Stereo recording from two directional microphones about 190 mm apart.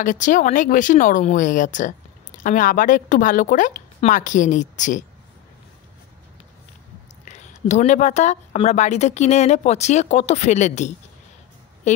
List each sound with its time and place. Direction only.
0.0 s speech: 40° left (ahead or behind)
7.2 s speech: 40° left (ahead or behind)